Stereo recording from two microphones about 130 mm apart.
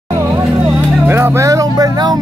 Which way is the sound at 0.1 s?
20° right (ahead or behind).